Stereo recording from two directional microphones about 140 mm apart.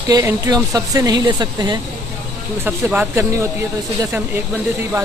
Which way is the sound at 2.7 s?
10° right (ahead or behind).